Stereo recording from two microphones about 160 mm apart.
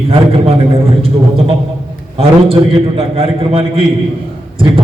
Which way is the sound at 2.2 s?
35° right (ahead or behind).